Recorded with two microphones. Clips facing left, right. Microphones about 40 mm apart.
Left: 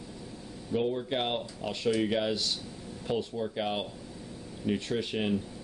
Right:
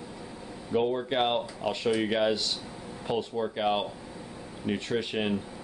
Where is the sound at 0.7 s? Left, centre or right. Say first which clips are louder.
Right 3 dB; centre.